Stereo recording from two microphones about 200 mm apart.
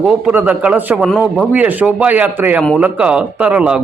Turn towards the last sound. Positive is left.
turn(degrees=-5)  # may be behind; listen again after turning